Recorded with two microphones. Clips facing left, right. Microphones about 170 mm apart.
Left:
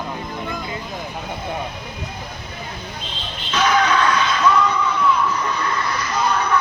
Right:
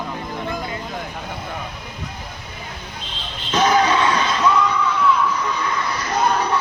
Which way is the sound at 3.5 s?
30° right (ahead or behind).